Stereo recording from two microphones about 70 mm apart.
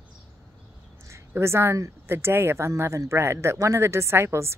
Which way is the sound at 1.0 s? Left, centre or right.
Right.